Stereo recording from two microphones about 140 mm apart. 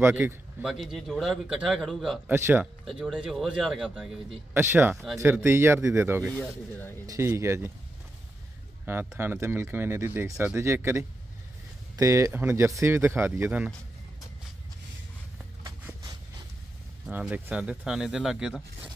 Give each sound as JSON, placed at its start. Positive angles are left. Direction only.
{"t": 0.0, "sound": "speech", "side_deg": -15}
{"t": 0.7, "sound": "a man's voice", "side_deg": 0}
{"t": 2.2, "sound": "speech", "side_deg": -15}
{"t": 2.8, "sound": "a man's voice", "side_deg": 0}
{"t": 4.6, "sound": "speech", "side_deg": -15}
{"t": 6.3, "sound": "speech", "side_deg": 10}
{"t": 7.1, "sound": "speech", "side_deg": -20}
{"t": 8.8, "sound": "speech", "side_deg": -15}
{"t": 15.6, "sound": "a sound", "side_deg": -25}
{"t": 17.1, "sound": "a man's voice", "side_deg": -10}